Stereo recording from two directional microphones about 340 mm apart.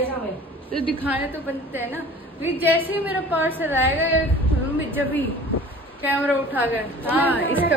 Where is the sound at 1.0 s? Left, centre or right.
Centre.